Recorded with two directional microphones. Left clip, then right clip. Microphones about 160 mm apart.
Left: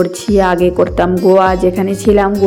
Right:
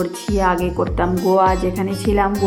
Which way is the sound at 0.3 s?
35° left (ahead or behind).